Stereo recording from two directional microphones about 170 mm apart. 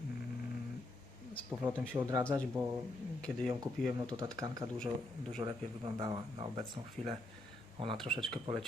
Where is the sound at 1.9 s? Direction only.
15° right (ahead or behind).